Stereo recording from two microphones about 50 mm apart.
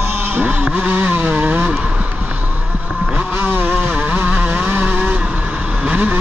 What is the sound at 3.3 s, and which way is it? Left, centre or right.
Vehicle, right.